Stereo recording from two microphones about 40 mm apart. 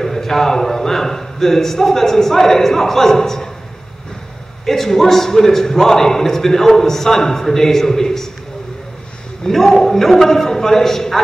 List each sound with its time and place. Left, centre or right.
0.0 s a man's voice: centre
4.6 s a man's voice: centre
9.4 s a man's voice: centre